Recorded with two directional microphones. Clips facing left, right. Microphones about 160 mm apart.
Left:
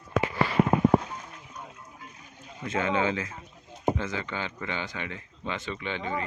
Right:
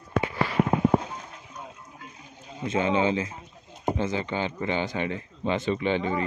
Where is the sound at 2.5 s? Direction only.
25° right (ahead or behind).